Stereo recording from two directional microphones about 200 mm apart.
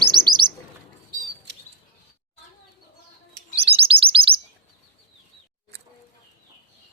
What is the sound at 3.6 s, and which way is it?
Chirp, 30° right (ahead or behind).